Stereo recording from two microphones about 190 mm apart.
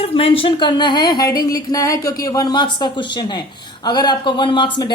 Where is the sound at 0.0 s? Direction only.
30° left (ahead or behind).